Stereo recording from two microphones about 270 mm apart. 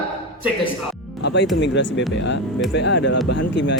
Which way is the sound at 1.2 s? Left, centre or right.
Left.